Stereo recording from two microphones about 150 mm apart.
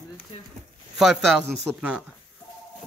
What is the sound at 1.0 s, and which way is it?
A man's voice, centre (ahead or behind).